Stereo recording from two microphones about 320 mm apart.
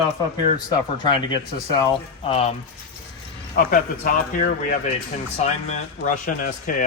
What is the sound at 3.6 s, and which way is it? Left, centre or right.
Speech, left.